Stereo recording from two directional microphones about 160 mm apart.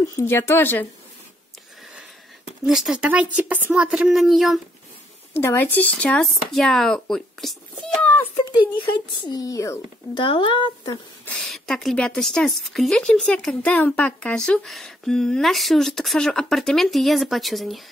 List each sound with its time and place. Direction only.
0.2 s speech: 15° left (ahead or behind)
2.0 s speech: 5° right (ahead or behind)
5.3 s speech: 15° left (ahead or behind)
8.5 s speech: 30° left (ahead or behind)
10.2 s speech: 35° left (ahead or behind)
11.2 s a woman's voice: 5° left (ahead or behind)